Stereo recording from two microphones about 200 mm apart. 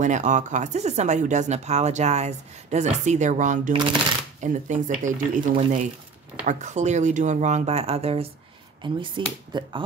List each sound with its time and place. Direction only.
0.0 s speech: 35° right (ahead or behind); by 9.8 s 20° right (ahead or behind)